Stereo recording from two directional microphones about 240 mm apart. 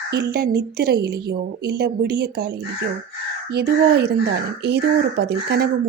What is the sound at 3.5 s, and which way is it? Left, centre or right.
A woman's voice, right.